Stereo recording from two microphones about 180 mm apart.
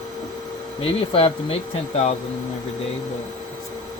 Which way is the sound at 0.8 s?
30° left (ahead or behind).